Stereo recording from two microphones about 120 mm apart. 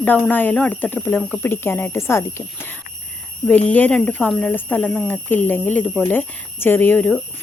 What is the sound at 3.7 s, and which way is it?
Speech, 15° left (ahead or behind).